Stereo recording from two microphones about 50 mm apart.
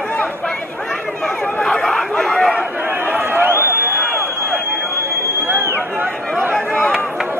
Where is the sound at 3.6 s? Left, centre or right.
Right.